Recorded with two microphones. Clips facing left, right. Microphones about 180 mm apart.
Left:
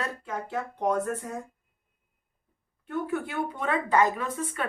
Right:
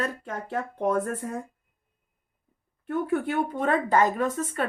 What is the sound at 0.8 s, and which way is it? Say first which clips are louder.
Speech: right 1 dB; 55° right (ahead or behind).